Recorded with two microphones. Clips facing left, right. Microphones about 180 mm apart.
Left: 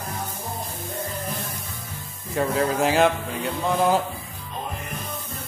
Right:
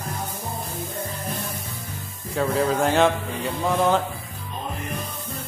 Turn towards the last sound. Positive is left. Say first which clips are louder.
# even
turn(degrees=0)  # may be behind; listen again after turning